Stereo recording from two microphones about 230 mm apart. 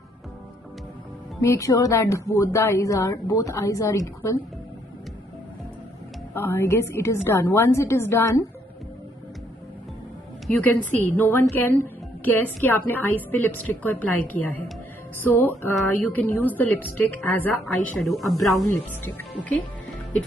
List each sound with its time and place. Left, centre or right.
1.4 s speech: centre
6.3 s speech: centre
10.6 s a woman's voice: centre